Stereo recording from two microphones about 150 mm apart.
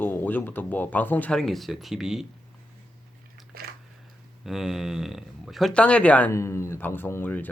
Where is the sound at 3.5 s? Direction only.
80° right.